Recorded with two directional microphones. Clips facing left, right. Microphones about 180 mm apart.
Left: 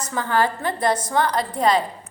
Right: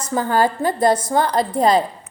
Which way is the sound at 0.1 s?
40° right (ahead or behind).